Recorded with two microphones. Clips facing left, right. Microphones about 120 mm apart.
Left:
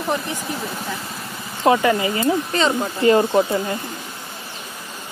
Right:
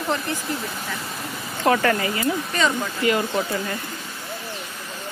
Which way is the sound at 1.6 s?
15° left (ahead or behind).